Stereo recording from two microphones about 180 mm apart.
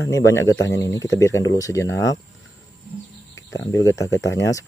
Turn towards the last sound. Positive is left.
turn(degrees=15)  # may be behind; listen again after turning